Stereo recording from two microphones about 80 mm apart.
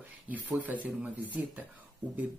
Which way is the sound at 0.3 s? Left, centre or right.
Right.